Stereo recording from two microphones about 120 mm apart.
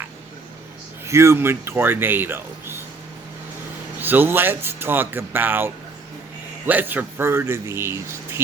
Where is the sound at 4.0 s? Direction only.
15° right (ahead or behind).